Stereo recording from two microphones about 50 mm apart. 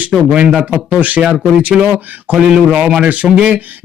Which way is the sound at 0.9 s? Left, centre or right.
Right.